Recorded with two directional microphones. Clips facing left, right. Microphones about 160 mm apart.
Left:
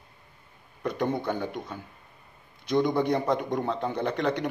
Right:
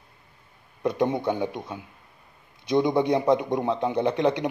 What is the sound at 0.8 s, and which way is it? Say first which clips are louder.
Speech: right 4 dB; 15° right (ahead or behind).